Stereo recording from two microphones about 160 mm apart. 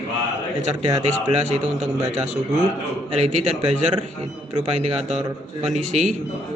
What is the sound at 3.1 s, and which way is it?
A man's voice, 40° right (ahead or behind).